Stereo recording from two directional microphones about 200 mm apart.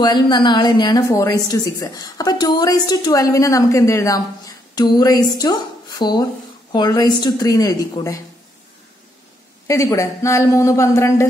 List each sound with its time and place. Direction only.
0.0 s speech: 20° left (ahead or behind)
9.7 s speech: 15° left (ahead or behind)